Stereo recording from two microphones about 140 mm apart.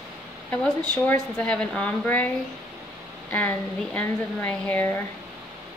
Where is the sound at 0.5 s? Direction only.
10° left (ahead or behind).